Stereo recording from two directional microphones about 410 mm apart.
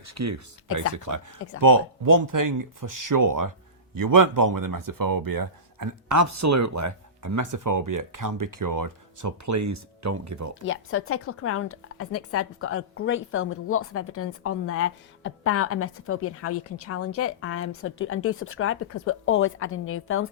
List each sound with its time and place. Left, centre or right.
0.0 s speech: right
10.5 s speech: left